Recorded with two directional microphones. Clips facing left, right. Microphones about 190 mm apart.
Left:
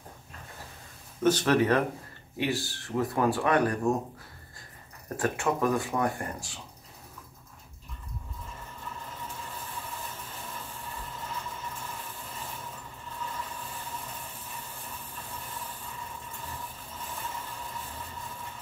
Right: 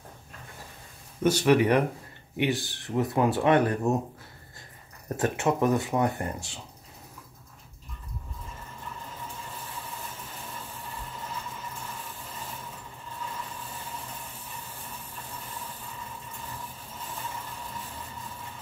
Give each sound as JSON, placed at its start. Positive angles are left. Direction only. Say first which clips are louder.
{"t": 1.2, "sound": "speech", "louder": "right 2 dB", "side_deg": -10}
{"t": 5.1, "sound": "speech", "louder": "right 2 dB", "side_deg": -20}